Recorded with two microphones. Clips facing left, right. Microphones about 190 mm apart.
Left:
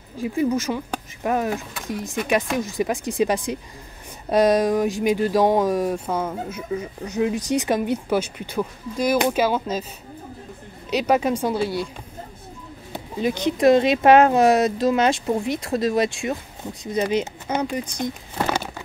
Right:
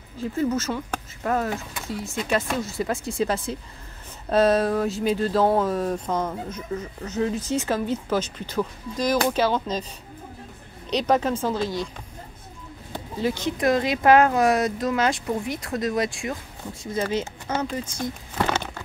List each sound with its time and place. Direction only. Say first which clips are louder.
0.2 s speech: left 3 dB; 10° left (ahead or behind)
10.9 s speech: left 2 dB; 10° left (ahead or behind)
12.9 s speech: left 2 dB; 15° left (ahead or behind)